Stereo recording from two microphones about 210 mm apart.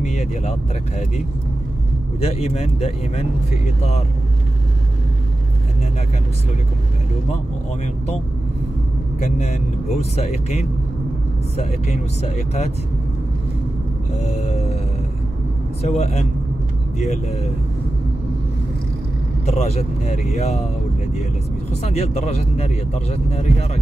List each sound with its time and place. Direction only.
0.0 s speech: 35° left (ahead or behind)
9.2 s speech: 30° left (ahead or behind)
14.2 s a sound: 30° left (ahead or behind)
15.8 s speech: 30° left (ahead or behind)
19.4 s speech: 30° left (ahead or behind)
21.8 s speech: 30° left (ahead or behind)